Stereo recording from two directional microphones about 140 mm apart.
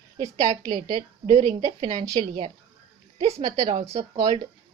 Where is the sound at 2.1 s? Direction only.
45° right (ahead or behind).